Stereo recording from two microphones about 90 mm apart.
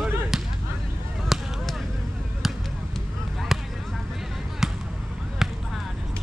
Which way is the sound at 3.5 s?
5° right (ahead or behind).